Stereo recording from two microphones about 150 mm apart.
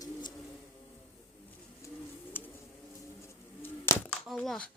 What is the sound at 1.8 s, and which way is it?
Bird, 20° left (ahead or behind).